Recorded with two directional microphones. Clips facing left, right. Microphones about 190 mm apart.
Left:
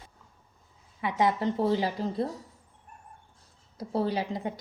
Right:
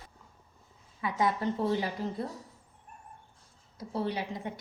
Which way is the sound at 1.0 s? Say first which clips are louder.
Left 3 dB; 25° left (ahead or behind).